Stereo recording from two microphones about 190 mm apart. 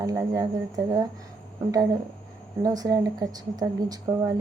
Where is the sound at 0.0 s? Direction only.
20° right (ahead or behind).